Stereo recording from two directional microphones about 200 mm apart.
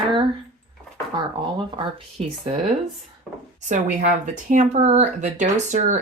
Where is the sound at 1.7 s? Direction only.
30° right (ahead or behind).